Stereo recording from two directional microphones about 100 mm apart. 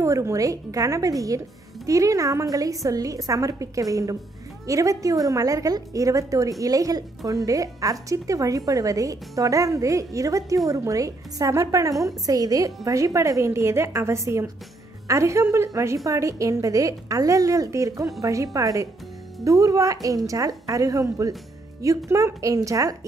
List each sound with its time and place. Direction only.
0.0 s a woman's voice: 30° right (ahead or behind)